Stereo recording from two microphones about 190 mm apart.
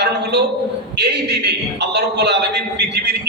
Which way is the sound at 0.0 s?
60° right (ahead or behind).